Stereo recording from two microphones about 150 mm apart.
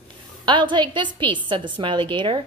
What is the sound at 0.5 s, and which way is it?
A woman's voice, 30° right (ahead or behind).